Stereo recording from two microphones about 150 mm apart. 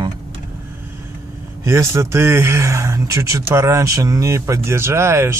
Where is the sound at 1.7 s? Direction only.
20° right (ahead or behind).